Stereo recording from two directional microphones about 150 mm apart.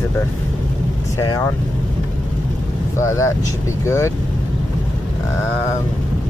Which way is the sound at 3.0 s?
20° left (ahead or behind).